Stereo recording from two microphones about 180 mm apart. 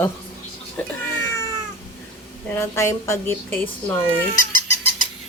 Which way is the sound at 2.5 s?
15° left (ahead or behind).